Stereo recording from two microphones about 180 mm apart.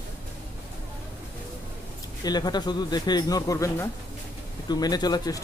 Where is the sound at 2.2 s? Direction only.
25° left (ahead or behind).